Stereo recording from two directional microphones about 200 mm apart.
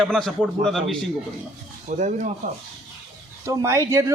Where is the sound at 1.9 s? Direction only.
40° right (ahead or behind).